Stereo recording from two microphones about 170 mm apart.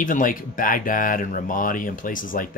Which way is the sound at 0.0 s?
50° left (ahead or behind).